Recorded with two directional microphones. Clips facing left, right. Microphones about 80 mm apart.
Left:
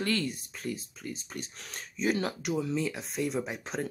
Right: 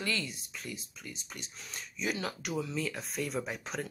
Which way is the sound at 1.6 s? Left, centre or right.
Left.